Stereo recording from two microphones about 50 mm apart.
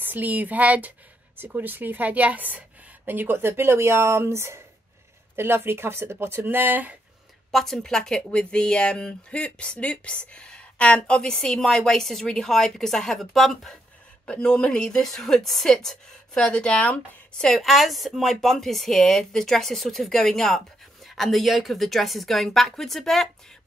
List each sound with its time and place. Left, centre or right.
0.0 s speech: right
3.3 s speech: right
5.3 s speech: right
7.5 s speech: centre
14.2 s speech: centre
17.6 s speech: centre